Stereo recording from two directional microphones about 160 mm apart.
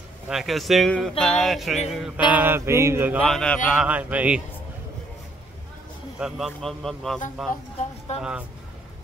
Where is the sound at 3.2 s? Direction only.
5° left (ahead or behind).